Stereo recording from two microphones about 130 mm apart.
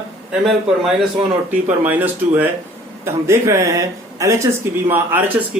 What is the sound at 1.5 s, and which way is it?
Speech, 15° right (ahead or behind).